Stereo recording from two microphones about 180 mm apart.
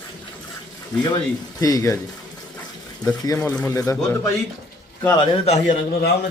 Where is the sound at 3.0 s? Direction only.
20° left (ahead or behind).